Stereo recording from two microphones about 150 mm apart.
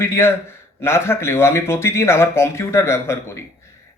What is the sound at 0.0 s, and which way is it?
Speech, 15° left (ahead or behind).